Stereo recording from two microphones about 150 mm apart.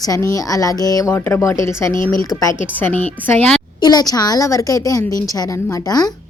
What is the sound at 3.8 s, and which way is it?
A woman's voice, 25° left (ahead or behind).